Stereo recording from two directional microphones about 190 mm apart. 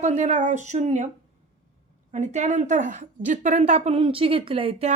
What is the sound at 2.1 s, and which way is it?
A woman's voice, 40° right (ahead or behind).